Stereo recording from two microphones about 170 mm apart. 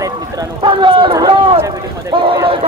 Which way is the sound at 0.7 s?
30° right (ahead or behind).